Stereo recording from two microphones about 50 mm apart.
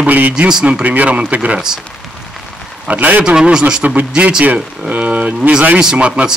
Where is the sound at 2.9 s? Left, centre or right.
Right.